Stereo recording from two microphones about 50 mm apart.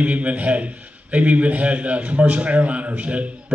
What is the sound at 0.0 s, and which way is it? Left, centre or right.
A man's voice, right.